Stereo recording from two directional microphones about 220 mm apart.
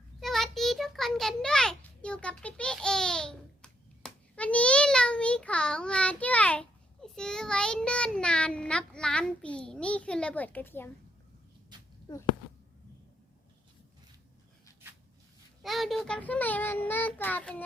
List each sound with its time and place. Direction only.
0.2 s a sound: centre (ahead or behind)
12.1 s speech: 20° left (ahead or behind)
15.6 s child singing: centre (ahead or behind)